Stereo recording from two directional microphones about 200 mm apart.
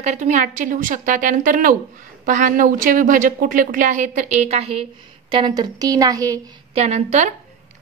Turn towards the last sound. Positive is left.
turn(degrees=-35)  # may be behind; listen again after turning